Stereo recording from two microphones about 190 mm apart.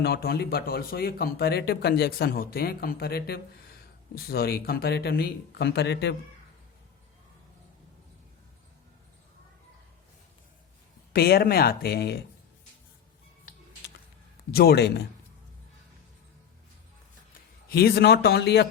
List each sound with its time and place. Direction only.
0.0 s speech: 55° left (ahead or behind)
11.1 s speech: 55° left (ahead or behind)
14.5 s speech: 55° left (ahead or behind)
17.7 s speech: 55° left (ahead or behind)